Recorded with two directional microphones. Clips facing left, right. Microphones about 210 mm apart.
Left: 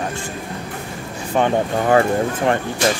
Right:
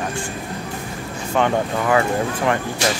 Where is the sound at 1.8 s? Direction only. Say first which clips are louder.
Left 4 dB; 40° left (ahead or behind).